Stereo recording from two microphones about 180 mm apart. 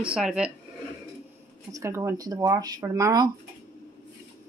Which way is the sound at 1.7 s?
15° right (ahead or behind).